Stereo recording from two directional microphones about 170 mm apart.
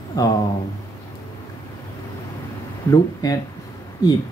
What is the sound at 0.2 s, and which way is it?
Speech, 20° left (ahead or behind).